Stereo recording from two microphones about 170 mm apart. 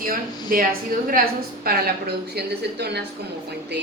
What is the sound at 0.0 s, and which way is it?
A woman's voice, 60° right (ahead or behind).